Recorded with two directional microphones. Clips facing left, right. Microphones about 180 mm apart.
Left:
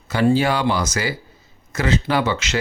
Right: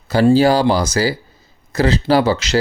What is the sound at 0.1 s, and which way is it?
Speech, 35° right (ahead or behind).